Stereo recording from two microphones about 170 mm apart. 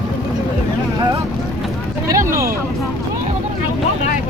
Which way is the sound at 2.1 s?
20° right (ahead or behind).